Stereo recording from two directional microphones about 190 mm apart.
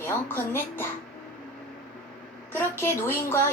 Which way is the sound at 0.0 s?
10° left (ahead or behind).